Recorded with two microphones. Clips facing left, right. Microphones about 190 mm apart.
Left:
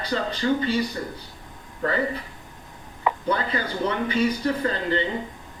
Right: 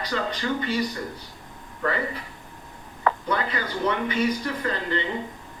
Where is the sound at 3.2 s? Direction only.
35° left (ahead or behind).